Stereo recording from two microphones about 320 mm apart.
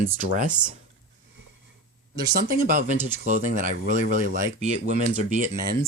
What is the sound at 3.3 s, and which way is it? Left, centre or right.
Speech, right.